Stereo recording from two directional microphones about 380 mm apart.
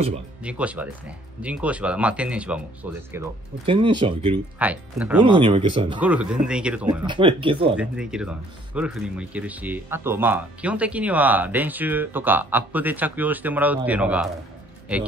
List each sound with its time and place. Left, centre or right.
0.4 s speech: centre